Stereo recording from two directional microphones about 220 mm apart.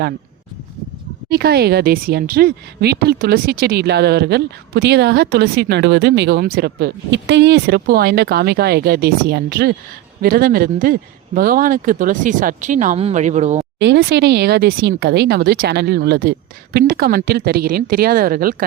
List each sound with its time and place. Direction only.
1.3 s speech: 45° right (ahead or behind); by 13.7 s 30° right (ahead or behind)
13.7 s speech: 50° right (ahead or behind)